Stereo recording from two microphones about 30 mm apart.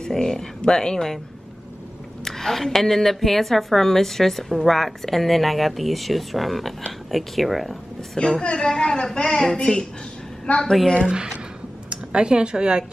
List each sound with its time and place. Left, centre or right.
0.0 s a woman's voice: centre
2.2 s a woman's voice: centre
8.2 s a woman's voice: left
11.9 s speech: right